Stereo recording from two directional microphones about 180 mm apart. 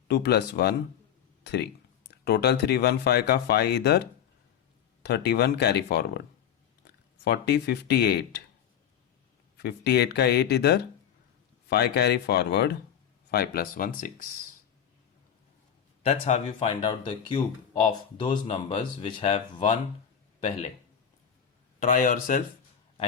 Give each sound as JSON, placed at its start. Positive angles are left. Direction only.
{"t": 0.1, "sound": "speech", "side_deg": 65}
{"t": 5.0, "sound": "speech", "side_deg": 65}
{"t": 9.6, "sound": "speech", "side_deg": 65}
{"t": 16.0, "sound": "speech", "side_deg": 35}
{"t": 18.2, "sound": "speech", "side_deg": 30}
{"t": 21.8, "sound": "speech", "side_deg": 50}